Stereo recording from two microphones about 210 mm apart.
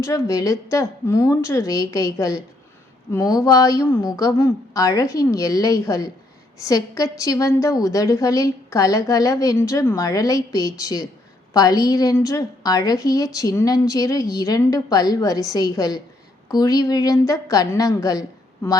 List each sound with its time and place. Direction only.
0.0 s a woman's voice: 15° left (ahead or behind)